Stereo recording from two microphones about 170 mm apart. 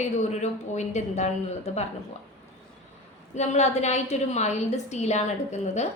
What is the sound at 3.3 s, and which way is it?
A woman's voice, 40° left (ahead or behind).